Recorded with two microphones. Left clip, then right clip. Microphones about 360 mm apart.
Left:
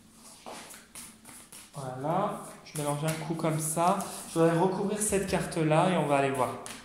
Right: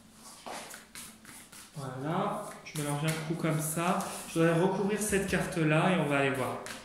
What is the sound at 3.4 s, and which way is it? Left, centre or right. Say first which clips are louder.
Speech: left 6 dB; centre.